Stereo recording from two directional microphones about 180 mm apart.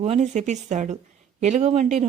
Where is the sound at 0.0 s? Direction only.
40° right (ahead or behind).